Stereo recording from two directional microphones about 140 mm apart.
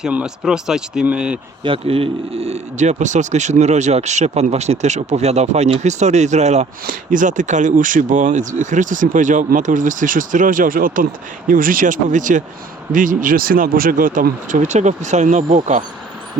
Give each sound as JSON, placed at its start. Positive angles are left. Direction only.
{"t": 0.0, "sound": "speech", "side_deg": -5}
{"t": 1.6, "sound": "speech", "side_deg": -40}
{"t": 6.8, "sound": "speech", "side_deg": -70}